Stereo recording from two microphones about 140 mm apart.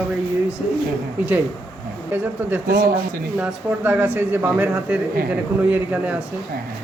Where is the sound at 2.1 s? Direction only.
15° right (ahead or behind).